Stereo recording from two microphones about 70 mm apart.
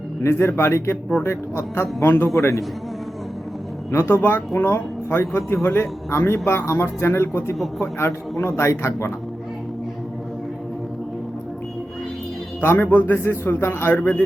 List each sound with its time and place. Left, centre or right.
0.2 s a man's voice: left
2.4 s a man's voice: left
3.9 s a man's voice: left
4.5 s a man's voice: left
12.6 s speech: left
13.1 s a man's voice: left